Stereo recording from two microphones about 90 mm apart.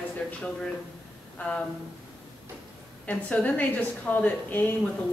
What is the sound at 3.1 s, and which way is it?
A woman's voice, 15° left (ahead or behind).